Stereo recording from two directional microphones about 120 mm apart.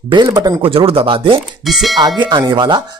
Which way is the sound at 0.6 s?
50° right (ahead or behind).